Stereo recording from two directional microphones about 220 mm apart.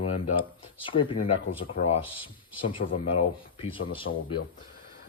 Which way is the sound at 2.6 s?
25° left (ahead or behind).